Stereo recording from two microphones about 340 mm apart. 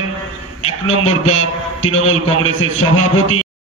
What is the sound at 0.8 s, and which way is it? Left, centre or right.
A man's voice, centre.